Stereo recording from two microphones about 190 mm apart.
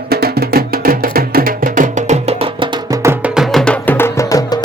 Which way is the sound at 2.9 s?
15° right (ahead or behind).